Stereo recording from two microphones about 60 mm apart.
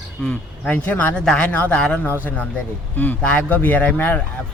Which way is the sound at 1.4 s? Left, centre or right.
Left.